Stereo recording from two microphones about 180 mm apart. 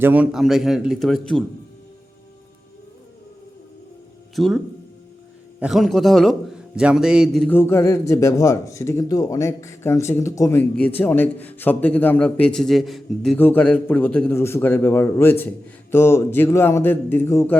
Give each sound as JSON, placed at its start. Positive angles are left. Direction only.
{"t": 0.0, "sound": "a man's voice", "side_deg": -10}
{"t": 4.4, "sound": "a man's voice", "side_deg": 0}
{"t": 7.4, "sound": "a man's voice", "side_deg": 10}